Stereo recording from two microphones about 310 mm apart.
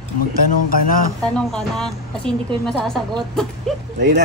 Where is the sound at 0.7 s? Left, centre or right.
Left.